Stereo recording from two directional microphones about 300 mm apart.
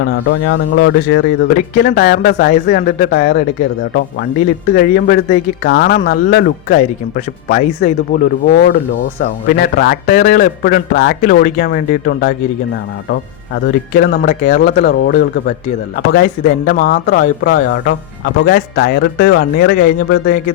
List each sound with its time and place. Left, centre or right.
0.3 s a man's voice: left
4.7 s a man's voice: left
14.0 s a man's voice: left